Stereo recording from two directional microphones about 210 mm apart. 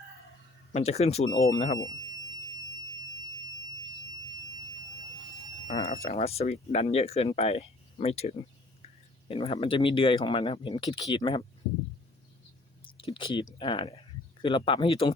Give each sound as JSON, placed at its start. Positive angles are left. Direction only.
{"t": 0.7, "sound": "speech", "side_deg": 30}
{"t": 5.6, "sound": "speech", "side_deg": 40}
{"t": 12.8, "sound": "speech", "side_deg": 25}